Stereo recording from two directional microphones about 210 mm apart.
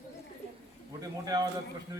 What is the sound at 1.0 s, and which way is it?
Speech, 15° right (ahead or behind).